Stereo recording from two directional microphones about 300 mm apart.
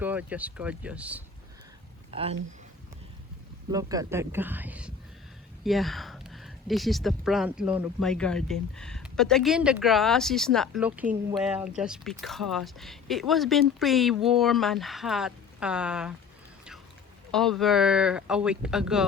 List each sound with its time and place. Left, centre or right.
0.0 s speech: centre
2.0 s speech: centre
3.7 s speech: centre
17.3 s speech: centre